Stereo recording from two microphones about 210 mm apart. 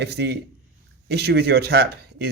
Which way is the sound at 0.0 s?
50° right (ahead or behind).